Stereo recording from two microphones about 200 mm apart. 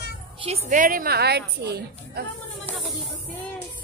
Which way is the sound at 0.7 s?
40° right (ahead or behind).